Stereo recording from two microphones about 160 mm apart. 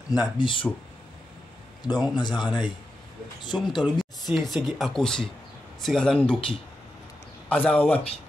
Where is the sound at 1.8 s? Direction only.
25° left (ahead or behind).